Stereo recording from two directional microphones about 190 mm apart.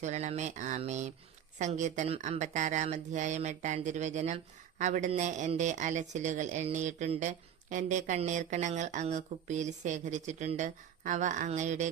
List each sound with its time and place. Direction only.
0.0 s speech: 35° right (ahead or behind)